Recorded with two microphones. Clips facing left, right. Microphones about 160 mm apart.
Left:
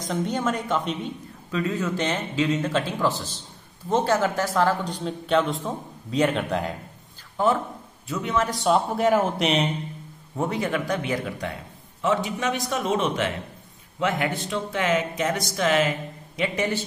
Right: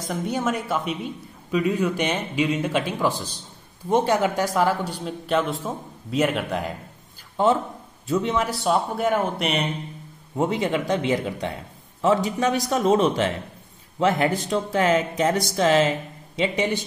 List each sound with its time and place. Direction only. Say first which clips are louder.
0.1 s speech: even; 10° right (ahead or behind)
8.1 s speech: right 5 dB; 30° right (ahead or behind)
8.6 s speech: left 2 dB; centre (ahead or behind)
10.3 s speech: right 3 dB; 20° right (ahead or behind)
12.0 s speech: right 4 dB; 35° right (ahead or behind); by 16.8 s 15° right (ahead or behind)